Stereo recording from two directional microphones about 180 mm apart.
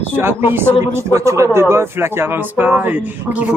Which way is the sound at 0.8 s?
15° right (ahead or behind).